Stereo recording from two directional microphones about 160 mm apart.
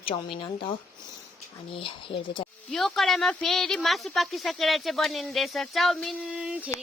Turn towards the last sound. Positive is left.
turn(degrees=-5)  # may be behind; listen again after turning